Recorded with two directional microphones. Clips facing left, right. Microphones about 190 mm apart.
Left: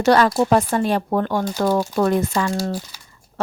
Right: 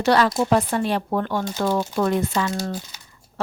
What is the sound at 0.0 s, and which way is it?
Speech, 45° left (ahead or behind).